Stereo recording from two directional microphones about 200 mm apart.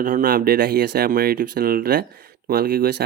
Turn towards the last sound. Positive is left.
turn(degrees=-50)  # may be behind; listen again after turning